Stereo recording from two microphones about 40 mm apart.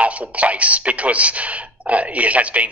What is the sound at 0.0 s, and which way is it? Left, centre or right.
A man's voice, right.